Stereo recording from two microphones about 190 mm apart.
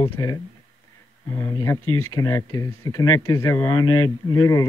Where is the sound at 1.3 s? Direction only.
15° left (ahead or behind).